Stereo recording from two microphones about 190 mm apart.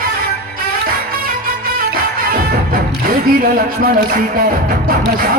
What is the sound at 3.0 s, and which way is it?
Speech, 50° right (ahead or behind).